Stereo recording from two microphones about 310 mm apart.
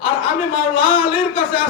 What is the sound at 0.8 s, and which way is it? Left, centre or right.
Speech, centre.